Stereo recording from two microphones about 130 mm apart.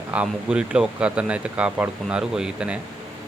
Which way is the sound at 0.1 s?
10° right (ahead or behind).